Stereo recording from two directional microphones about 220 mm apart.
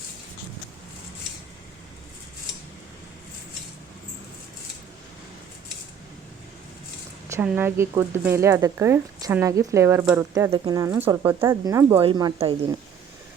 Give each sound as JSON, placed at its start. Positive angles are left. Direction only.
{"t": 7.3, "sound": "speech", "side_deg": -10}